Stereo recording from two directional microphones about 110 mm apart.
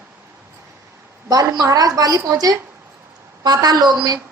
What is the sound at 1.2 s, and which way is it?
A woman's voice, 35° right (ahead or behind).